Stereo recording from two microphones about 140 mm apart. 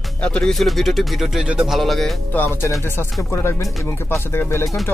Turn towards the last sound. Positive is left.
turn(degrees=20)  # may be behind; listen again after turning